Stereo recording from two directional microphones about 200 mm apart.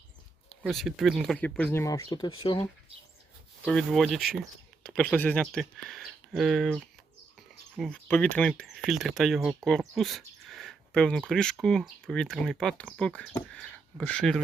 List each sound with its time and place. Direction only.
0.6 s speech: centre (ahead or behind); by 2.6 s 25° left (ahead or behind)
3.7 s speech: centre (ahead or behind)